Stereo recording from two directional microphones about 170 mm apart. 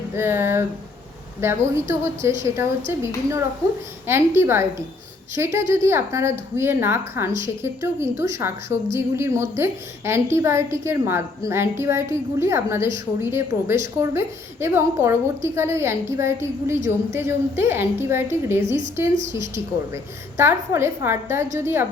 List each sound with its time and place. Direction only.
0.2 s a woman's voice: 15° right (ahead or behind)
20.3 s a woman's voice: 15° right (ahead or behind)